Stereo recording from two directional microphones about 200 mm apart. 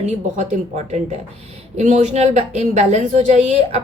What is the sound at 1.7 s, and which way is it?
A woman's voice, 35° right (ahead or behind).